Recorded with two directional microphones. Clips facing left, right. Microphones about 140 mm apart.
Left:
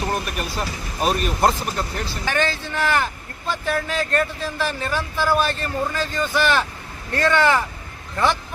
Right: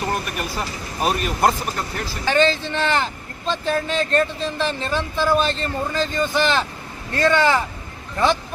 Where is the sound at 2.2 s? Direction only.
20° right (ahead or behind).